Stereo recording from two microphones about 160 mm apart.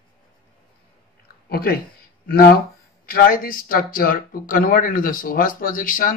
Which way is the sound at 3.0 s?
65° left (ahead or behind).